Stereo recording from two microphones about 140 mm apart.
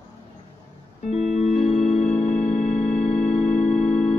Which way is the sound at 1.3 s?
55° left (ahead or behind).